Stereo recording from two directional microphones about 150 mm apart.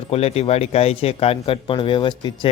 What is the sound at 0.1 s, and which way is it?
Speech, 45° left (ahead or behind).